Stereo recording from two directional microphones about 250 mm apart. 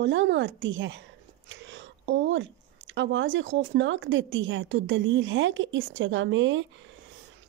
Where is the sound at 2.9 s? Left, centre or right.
Right.